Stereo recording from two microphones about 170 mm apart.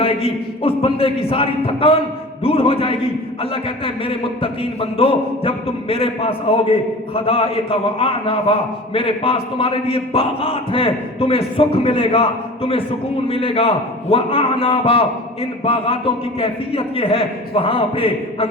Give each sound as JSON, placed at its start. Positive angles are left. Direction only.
{"t": 0.0, "sound": "a man's voice", "side_deg": 35}